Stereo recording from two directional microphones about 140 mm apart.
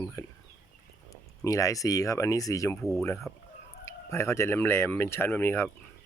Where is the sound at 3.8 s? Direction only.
20° left (ahead or behind).